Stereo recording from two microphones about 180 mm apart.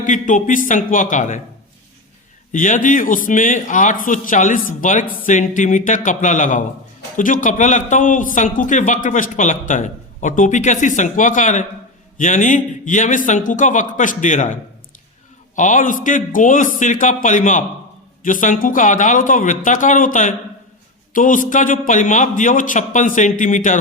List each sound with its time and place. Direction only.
0.0 s a man's voice: 45° left (ahead or behind)
2.5 s a man's voice: 45° left (ahead or behind)